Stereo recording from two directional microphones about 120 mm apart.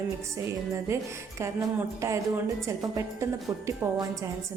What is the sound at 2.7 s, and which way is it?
A woman's voice, 25° right (ahead or behind).